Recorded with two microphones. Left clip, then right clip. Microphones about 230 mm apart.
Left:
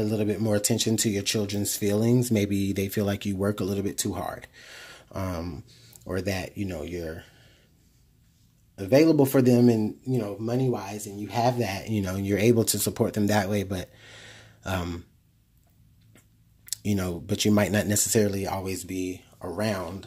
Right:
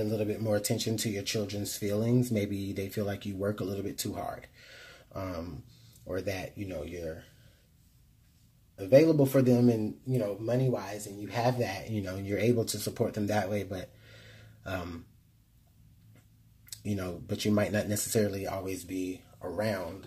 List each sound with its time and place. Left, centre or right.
0.0 s speech: left
8.7 s speech: left
16.6 s speech: left